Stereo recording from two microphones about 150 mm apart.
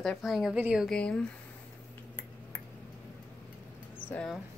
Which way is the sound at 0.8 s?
5° left (ahead or behind).